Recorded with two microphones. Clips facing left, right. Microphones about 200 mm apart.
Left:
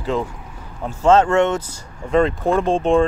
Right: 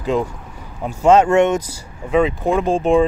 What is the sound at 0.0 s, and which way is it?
Speech, 15° right (ahead or behind).